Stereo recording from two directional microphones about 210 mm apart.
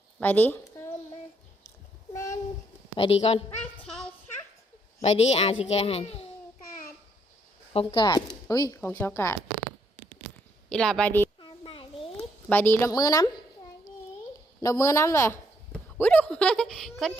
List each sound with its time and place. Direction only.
0.2 s speech: 10° left (ahead or behind)
2.1 s a sound: 15° left (ahead or behind)
3.0 s a child's voice: 30° left (ahead or behind)
3.8 s a sound: 5° left (ahead or behind)
5.0 s a child's voice: 30° left (ahead or behind)
7.7 s speech: 25° left (ahead or behind); by 9.4 s 10° left (ahead or behind)
10.7 s a woman's voice: 5° left (ahead or behind)
11.3 s a sound: 20° left (ahead or behind)
12.5 s speech: 10° left (ahead or behind)
14.6 s speech: 15° left (ahead or behind)